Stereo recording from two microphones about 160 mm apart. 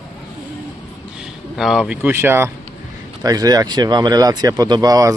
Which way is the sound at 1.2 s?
Centre (ahead or behind).